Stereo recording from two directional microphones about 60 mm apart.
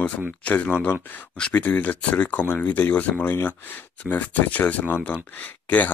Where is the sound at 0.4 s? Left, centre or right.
Left.